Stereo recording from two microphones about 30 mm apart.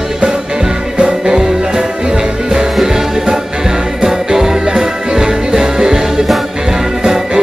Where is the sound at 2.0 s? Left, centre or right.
Right.